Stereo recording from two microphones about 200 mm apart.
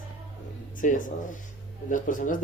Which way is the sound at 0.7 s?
40° left (ahead or behind).